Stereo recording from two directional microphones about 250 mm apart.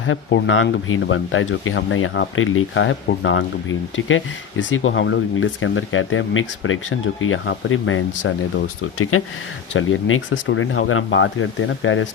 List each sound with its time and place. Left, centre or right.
0.0 s speech: left